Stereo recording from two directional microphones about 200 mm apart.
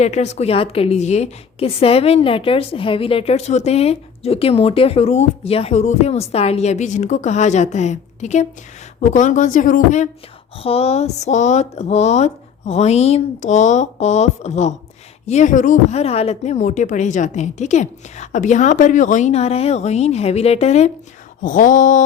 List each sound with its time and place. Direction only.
0.0 s a woman's voice: 35° left (ahead or behind)